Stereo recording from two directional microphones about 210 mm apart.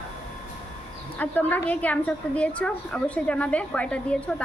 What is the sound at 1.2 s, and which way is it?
A woman's voice, 5° left (ahead or behind).